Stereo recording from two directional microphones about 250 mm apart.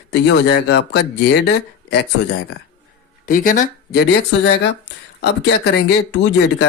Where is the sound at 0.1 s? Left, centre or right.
Left.